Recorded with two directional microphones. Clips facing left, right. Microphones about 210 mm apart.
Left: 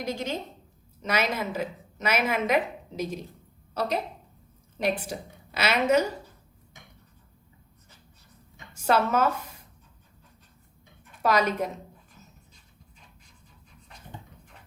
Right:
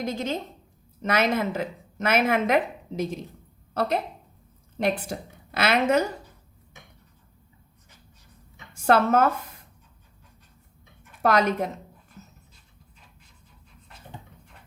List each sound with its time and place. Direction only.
0.0 s a woman's voice: 55° right (ahead or behind)
8.8 s a woman's voice: 55° right (ahead or behind)
11.2 s a woman's voice: 55° right (ahead or behind)